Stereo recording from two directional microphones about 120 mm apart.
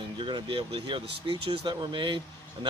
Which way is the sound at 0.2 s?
45° right (ahead or behind).